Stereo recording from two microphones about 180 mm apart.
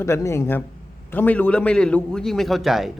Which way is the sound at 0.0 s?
15° left (ahead or behind).